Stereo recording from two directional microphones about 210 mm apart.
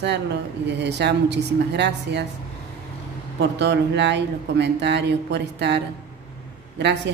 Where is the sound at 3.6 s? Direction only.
55° right (ahead or behind).